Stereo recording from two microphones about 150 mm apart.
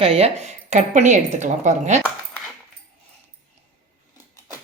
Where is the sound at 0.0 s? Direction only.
40° right (ahead or behind).